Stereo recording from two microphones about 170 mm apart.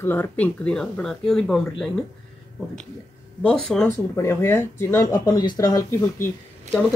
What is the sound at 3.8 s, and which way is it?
Speech, 15° left (ahead or behind).